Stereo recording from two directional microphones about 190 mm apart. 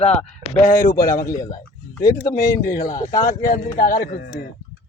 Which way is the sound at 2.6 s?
45° left (ahead or behind).